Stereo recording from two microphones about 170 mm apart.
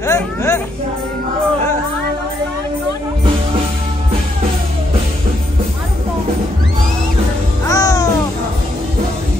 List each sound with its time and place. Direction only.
0.0 s speech: 15° left (ahead or behind)
7.6 s music: 20° left (ahead or behind)